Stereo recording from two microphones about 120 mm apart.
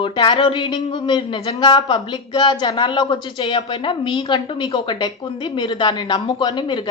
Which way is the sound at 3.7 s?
50° left (ahead or behind).